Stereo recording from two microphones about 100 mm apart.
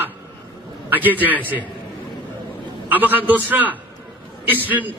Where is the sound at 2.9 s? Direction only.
20° right (ahead or behind).